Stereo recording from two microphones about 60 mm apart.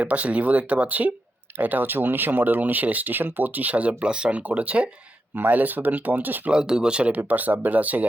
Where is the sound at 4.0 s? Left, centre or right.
Centre; by 6.5 s right.